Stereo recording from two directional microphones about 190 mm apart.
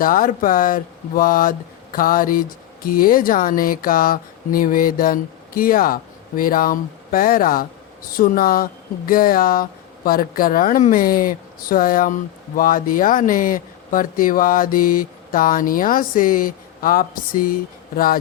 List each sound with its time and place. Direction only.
0.0 s speech: 45° left (ahead or behind)